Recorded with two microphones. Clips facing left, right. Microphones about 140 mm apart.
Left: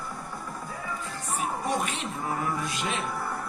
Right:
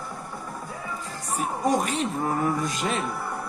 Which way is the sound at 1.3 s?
40° right (ahead or behind).